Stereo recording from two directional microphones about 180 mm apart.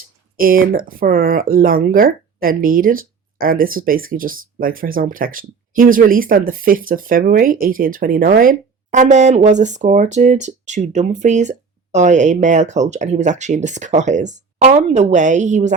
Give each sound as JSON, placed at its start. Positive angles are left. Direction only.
{"t": 0.3, "sound": "speech", "side_deg": -50}